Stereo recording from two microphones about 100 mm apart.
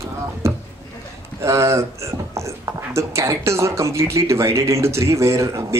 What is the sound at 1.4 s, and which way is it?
Speech, 30° right (ahead or behind).